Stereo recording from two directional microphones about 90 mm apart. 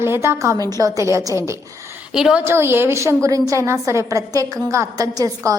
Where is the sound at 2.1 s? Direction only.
5° right (ahead or behind).